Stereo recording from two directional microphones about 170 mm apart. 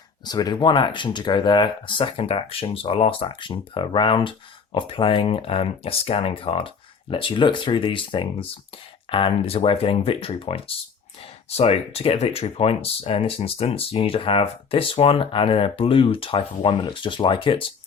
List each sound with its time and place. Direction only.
0.3 s speech: 25° left (ahead or behind)